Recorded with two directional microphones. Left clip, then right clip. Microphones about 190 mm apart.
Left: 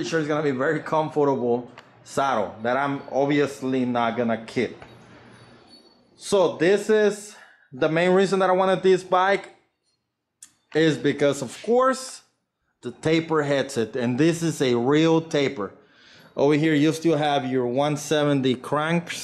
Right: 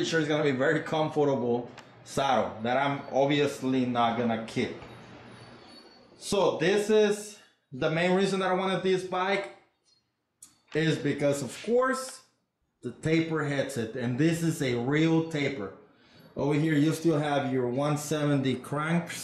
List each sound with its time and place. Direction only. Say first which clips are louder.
0.0 s a man's voice: left 3 dB; 20° left (ahead or behind)
6.2 s a man's voice: left 6 dB; 20° left (ahead or behind)
10.7 s a man's voice: left 7 dB; 25° left (ahead or behind)
11.6 s speech: left 6 dB; centre (ahead or behind)
12.8 s a man's voice: left 5 dB; 25° left (ahead or behind)
16.6 s speech: left 6 dB; centre (ahead or behind)